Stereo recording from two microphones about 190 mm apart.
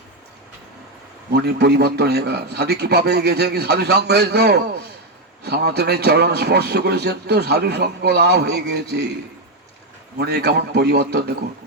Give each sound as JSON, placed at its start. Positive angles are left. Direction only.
{"t": 1.3, "sound": "a man's voice", "side_deg": -60}
{"t": 10.2, "sound": "a man's voice", "side_deg": -60}